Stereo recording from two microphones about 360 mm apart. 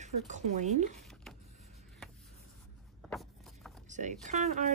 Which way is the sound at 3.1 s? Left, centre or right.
Centre.